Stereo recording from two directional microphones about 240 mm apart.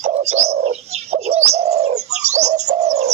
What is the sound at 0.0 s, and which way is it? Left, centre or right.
Bird, right.